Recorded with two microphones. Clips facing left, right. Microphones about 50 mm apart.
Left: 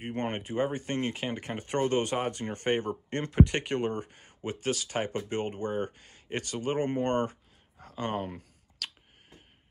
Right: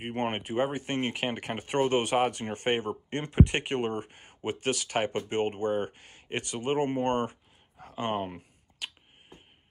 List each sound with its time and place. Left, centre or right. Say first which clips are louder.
0.0 s speech: right 2 dB; right